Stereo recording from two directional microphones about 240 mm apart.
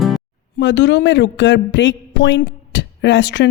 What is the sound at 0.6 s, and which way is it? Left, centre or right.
Speech, left.